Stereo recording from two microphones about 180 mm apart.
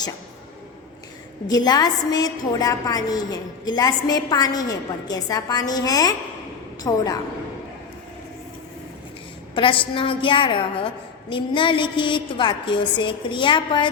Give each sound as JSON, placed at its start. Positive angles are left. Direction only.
{"t": 1.5, "sound": "a woman's voice", "side_deg": 20}
{"t": 9.6, "sound": "a woman's voice", "side_deg": 30}